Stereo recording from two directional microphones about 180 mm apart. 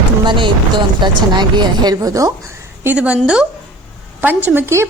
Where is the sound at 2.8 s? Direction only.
10° right (ahead or behind).